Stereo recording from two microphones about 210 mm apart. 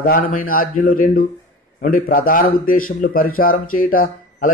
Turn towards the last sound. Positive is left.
turn(degrees=45)  # may be behind; listen again after turning